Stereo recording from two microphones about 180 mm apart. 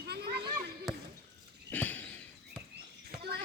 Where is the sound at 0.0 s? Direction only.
65° right (ahead or behind).